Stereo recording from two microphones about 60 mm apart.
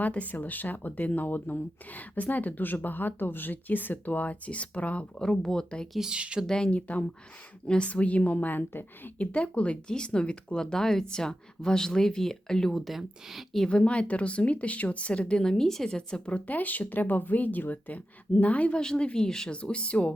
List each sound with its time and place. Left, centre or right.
0.0 s speech: left
5.2 s speech: centre
5.9 s speech: centre
6.1 s speech: centre
6.5 s speech: centre
13.7 s speech: centre
16.5 s speech: left